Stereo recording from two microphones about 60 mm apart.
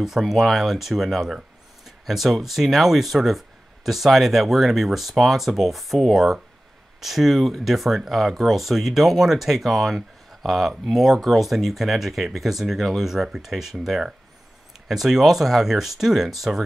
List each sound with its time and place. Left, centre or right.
0.0 s speech: centre